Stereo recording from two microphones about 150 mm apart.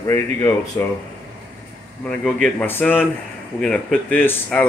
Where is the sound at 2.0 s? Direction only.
10° left (ahead or behind).